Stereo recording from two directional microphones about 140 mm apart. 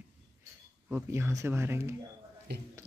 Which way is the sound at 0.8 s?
15° right (ahead or behind).